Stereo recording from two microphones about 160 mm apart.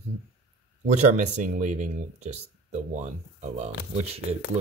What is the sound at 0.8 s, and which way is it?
Speech, 50° right (ahead or behind).